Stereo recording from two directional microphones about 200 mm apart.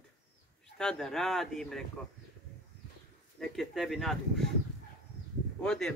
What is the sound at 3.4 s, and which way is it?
Speech, centre (ahead or behind).